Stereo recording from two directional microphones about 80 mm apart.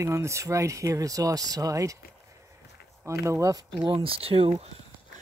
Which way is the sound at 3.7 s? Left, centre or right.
Right.